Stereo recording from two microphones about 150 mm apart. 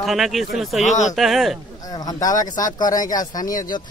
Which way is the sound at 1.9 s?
25° left (ahead or behind).